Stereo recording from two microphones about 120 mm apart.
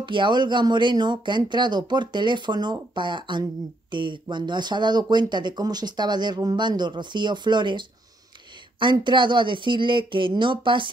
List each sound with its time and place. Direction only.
0.0 s speech: 40° right (ahead or behind)